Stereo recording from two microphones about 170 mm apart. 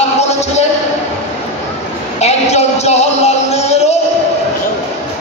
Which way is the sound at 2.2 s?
40° left (ahead or behind).